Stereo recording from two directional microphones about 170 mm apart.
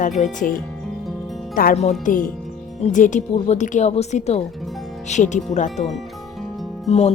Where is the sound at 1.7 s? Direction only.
40° left (ahead or behind).